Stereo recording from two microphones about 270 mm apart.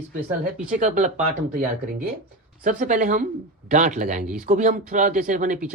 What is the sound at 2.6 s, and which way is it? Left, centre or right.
Speech, right.